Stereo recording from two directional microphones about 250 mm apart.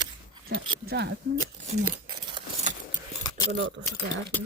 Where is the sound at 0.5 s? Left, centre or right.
Right.